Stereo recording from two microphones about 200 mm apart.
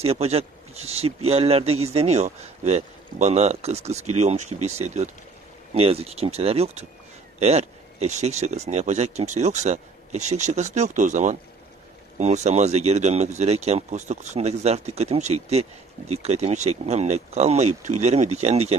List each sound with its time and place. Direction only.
0.0 s speech: 30° right (ahead or behind)